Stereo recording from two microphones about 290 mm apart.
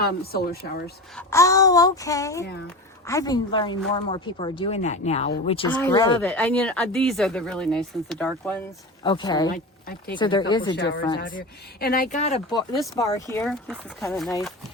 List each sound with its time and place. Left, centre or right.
0.0 s speech: left
1.1 s speech: centre
9.0 s speech: centre
10.8 s speech: left; by 14.1 s centre